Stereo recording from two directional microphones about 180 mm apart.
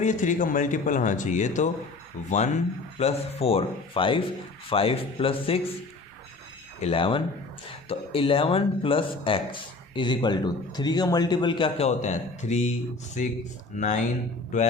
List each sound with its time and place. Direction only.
0.0 s speech: 45° left (ahead or behind)
6.7 s speech: 35° left (ahead or behind)